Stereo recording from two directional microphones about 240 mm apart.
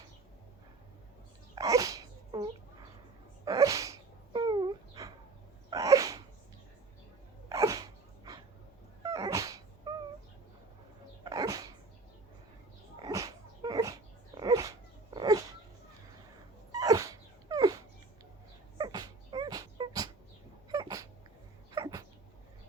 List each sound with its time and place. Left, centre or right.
1.5 s sneeze: centre
7.5 s sneeze: centre
9.0 s a sound: centre
11.2 s dog: centre
13.0 s dog: centre
16.7 s dog: centre
18.8 s dog: centre
20.7 s cat: centre
21.7 s sneeze: centre